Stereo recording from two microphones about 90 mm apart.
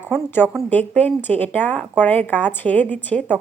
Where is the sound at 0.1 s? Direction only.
25° left (ahead or behind).